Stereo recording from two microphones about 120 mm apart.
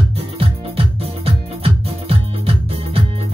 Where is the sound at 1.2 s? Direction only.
55° right (ahead or behind).